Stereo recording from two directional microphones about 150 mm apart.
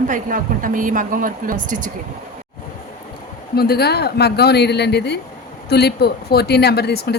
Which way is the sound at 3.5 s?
90° left.